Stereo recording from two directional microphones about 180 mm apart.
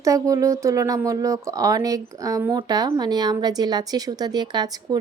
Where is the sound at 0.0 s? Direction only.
20° right (ahead or behind).